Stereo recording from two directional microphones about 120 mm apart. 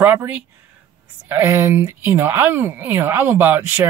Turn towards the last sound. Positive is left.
turn(degrees=-15)  # may be behind; listen again after turning